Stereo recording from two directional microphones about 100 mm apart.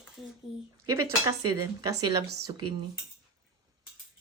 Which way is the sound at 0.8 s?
30° right (ahead or behind).